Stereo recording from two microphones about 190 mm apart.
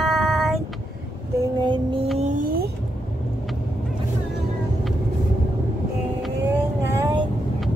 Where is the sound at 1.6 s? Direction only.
25° right (ahead or behind).